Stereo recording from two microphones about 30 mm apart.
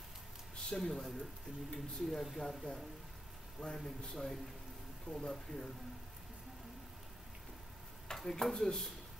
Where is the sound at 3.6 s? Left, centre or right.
Left.